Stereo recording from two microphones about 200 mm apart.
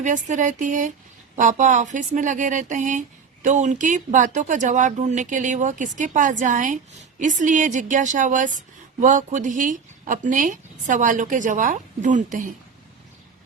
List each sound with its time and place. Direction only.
0.0 s a woman's voice: 40° right (ahead or behind)